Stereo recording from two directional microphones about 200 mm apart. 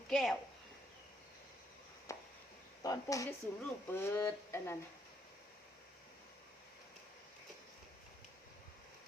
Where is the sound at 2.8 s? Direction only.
15° left (ahead or behind).